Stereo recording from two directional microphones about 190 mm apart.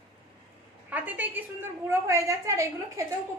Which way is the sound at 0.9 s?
10° right (ahead or behind).